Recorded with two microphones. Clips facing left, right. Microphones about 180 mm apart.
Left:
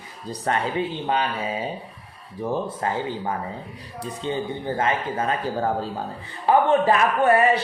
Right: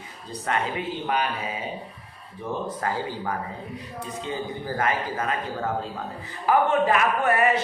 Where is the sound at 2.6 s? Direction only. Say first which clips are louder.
Left 2 dB; 25° left (ahead or behind).